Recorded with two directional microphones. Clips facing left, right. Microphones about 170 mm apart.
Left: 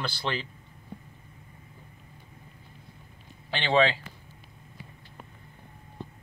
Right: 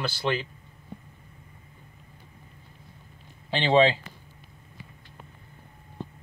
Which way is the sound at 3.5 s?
25° right (ahead or behind).